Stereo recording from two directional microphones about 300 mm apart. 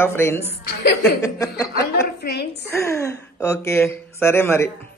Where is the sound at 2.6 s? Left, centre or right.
Centre.